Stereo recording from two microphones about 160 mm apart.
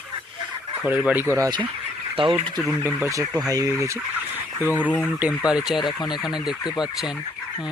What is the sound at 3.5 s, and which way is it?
Fowl, 20° right (ahead or behind).